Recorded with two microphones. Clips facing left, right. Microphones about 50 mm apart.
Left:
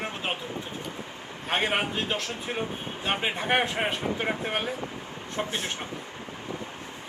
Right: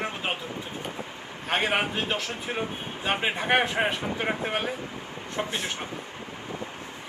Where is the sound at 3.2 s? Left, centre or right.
Centre.